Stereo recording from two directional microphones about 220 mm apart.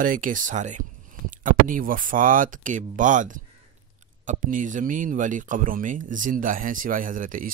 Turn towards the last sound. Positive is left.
turn(degrees=-40)  # may be behind; listen again after turning